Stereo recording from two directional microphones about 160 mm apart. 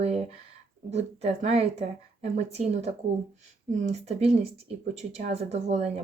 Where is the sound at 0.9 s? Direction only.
40° right (ahead or behind).